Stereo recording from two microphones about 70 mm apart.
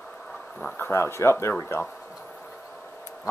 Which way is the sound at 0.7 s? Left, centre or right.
Left.